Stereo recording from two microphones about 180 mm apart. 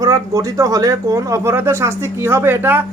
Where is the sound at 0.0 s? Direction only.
20° right (ahead or behind).